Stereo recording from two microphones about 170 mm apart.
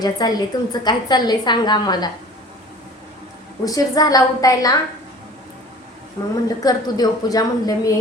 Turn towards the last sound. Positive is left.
turn(degrees=20)  # may be behind; listen again after turning